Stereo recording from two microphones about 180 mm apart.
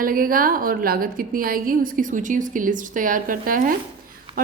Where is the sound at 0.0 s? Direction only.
50° right (ahead or behind).